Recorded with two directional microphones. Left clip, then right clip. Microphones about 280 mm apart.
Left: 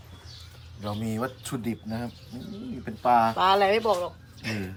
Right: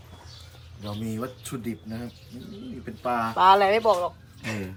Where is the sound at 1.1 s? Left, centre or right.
Left.